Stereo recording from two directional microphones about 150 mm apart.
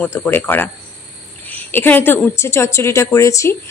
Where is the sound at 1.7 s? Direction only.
15° left (ahead or behind).